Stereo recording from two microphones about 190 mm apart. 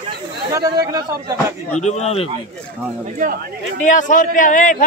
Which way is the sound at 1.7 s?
35° left (ahead or behind).